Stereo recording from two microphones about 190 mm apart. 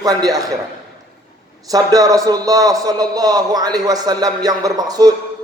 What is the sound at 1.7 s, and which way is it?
A man's voice, 20° right (ahead or behind).